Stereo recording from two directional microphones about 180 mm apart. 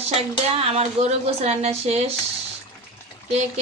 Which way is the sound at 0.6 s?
35° right (ahead or behind).